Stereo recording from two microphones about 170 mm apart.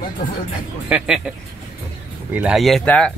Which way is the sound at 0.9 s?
5° right (ahead or behind).